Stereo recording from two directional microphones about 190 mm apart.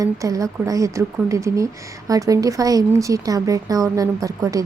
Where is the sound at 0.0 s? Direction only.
20° right (ahead or behind).